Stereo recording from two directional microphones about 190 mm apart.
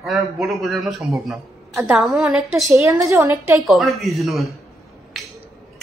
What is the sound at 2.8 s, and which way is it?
Speech, 15° right (ahead or behind).